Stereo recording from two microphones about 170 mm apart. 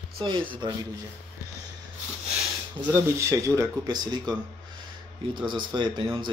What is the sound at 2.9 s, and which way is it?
Speech, 15° right (ahead or behind).